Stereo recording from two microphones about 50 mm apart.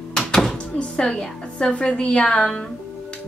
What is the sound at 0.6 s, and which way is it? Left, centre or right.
A woman's voice, centre.